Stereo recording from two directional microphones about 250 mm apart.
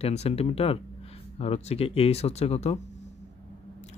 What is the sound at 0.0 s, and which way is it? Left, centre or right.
Speech, left.